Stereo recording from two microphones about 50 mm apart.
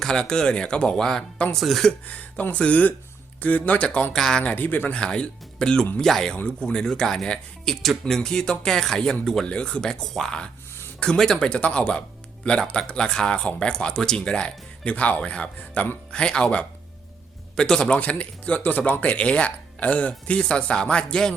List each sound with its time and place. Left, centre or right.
0.0 s speech: centre
2.0 s speech: left
3.8 s speech: centre
4.2 s speech: centre
4.4 s speech: left
4.9 s speech: centre
6.3 s speech: centre
9.5 s speech: left
17.9 s speech: left